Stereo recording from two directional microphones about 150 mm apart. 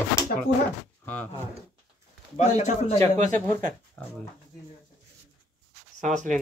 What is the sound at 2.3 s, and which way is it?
Speech, 50° left (ahead or behind).